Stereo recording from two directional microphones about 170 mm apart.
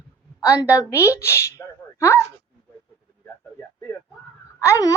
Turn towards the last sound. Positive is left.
turn(degrees=20)  # may be behind; listen again after turning